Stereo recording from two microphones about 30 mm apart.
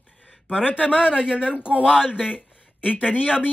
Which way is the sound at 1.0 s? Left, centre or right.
Right.